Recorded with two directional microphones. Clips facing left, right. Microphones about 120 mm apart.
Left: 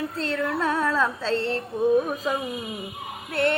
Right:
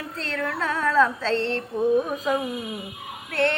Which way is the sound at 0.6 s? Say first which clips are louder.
Right 4 dB; 15° left (ahead or behind).